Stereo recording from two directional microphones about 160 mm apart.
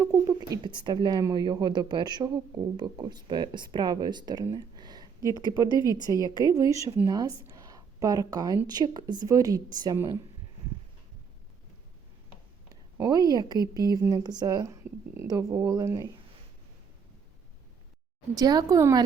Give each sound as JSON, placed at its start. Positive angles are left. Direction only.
{"t": 0.0, "sound": "speech", "side_deg": -20}
{"t": 4.4, "sound": "a sound", "side_deg": -25}
{"t": 5.6, "sound": "a woman's voice", "side_deg": 25}
{"t": 6.5, "sound": "speech", "side_deg": -20}
{"t": 12.6, "sound": "a sound", "side_deg": -25}
{"t": 13.3, "sound": "speech", "side_deg": -25}
{"t": 18.3, "sound": "speech", "side_deg": -25}